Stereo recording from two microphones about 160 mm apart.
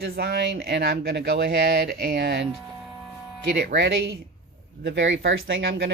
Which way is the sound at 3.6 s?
90° right.